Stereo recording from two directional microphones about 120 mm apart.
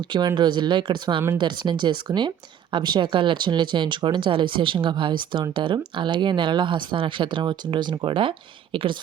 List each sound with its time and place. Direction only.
0.1 s speech: 40° right (ahead or behind)